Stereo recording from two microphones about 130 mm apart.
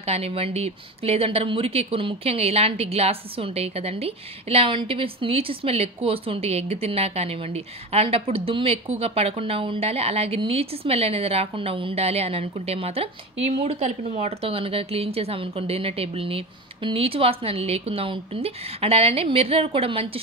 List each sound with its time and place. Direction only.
0.0 s a woman's voice: 50° right (ahead or behind)